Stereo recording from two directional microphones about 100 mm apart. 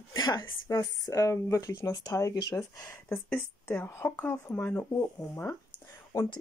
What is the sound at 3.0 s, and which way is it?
Speech, 15° left (ahead or behind).